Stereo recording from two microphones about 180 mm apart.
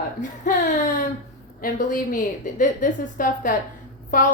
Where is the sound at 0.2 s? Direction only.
45° left (ahead or behind).